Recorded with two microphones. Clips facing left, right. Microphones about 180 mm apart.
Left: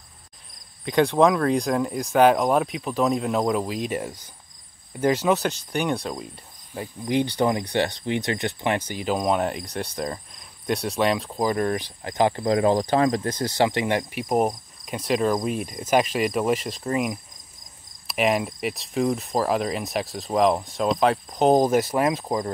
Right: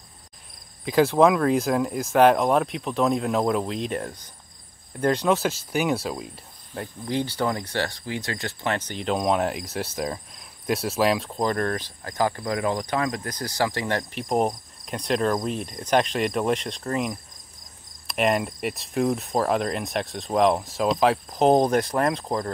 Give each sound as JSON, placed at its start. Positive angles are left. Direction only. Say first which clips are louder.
{"t": 0.8, "sound": "speech", "louder": "right 1 dB", "side_deg": -5}
{"t": 7.1, "sound": "speech", "louder": "left 4 dB", "side_deg": 15}
{"t": 14.3, "sound": "speech", "louder": "left 1 dB", "side_deg": 0}